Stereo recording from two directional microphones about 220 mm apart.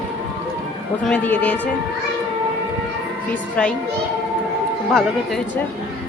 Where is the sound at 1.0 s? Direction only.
5° left (ahead or behind).